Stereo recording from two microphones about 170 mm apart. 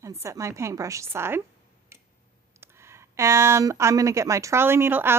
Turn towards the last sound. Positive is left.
turn(degrees=-15)  # may be behind; listen again after turning